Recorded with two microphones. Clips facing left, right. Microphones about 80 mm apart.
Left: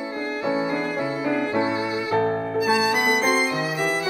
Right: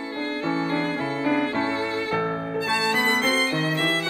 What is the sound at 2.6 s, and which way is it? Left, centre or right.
Violin, centre.